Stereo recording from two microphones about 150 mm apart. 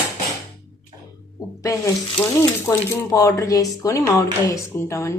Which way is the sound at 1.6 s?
20° left (ahead or behind).